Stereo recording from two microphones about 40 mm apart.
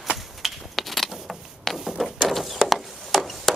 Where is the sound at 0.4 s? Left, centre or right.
Centre.